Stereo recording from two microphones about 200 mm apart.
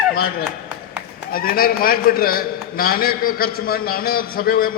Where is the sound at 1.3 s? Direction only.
45° left (ahead or behind).